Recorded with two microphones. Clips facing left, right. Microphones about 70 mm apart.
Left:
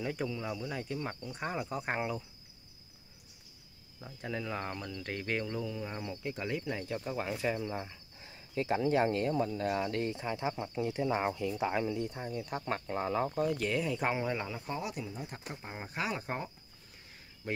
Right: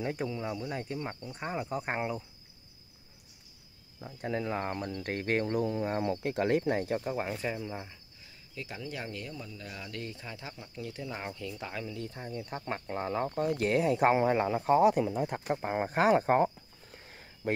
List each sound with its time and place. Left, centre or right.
0.2 s speech: centre
1.3 s speech: centre
4.3 s speech: right
7.0 s speech: right
7.4 s speech: centre
8.2 s speech: left
10.5 s speech: left
10.8 s speech: left
12.2 s speech: centre
12.6 s speech: centre
13.4 s speech: right
15.0 s speech: right